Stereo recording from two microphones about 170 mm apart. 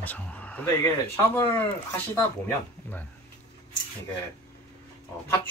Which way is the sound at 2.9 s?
10° left (ahead or behind).